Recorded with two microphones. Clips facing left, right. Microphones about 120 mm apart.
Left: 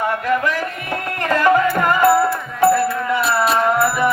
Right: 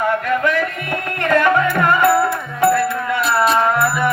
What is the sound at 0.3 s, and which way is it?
Music, 35° left (ahead or behind).